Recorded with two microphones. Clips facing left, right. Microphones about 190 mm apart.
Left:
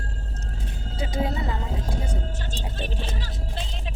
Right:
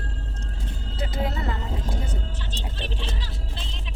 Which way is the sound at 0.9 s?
15° left (ahead or behind).